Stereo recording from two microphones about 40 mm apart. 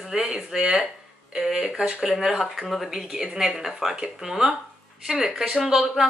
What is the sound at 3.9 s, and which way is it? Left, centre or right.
Speech, centre.